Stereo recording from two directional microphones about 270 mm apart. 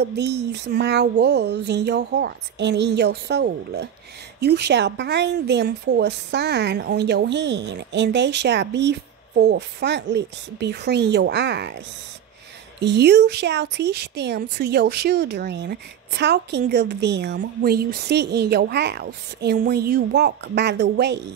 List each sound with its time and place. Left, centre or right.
0.0 s speech: right
12.8 s speech: right